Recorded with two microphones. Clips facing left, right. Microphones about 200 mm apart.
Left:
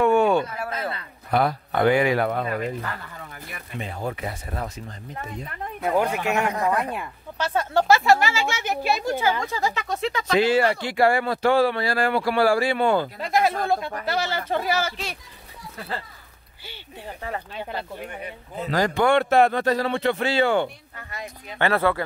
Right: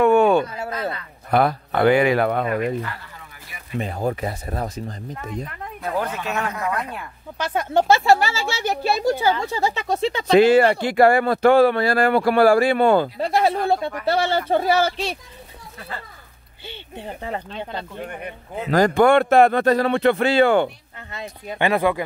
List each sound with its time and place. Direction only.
0.0 s a sound: 60° right (ahead or behind)
1.3 s speech: 60° right (ahead or behind)
3.8 s speech: 40° right (ahead or behind)
5.9 s speech: 15° left (ahead or behind)
7.3 s speech: 15° right (ahead or behind)
7.9 s speech: 30° right (ahead or behind)
10.3 s speech: 55° right (ahead or behind)
13.2 s speech: 30° right (ahead or behind)
16.6 s speech: 25° right (ahead or behind)
17.5 s speech: 10° left (ahead or behind)
18.2 s speech: 50° right (ahead or behind)
21.5 s speech: 15° right (ahead or behind)